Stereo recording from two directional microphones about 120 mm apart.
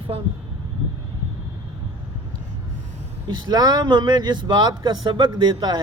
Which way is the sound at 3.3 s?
35° right (ahead or behind).